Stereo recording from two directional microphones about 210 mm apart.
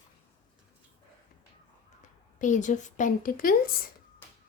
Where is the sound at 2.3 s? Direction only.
35° left (ahead or behind).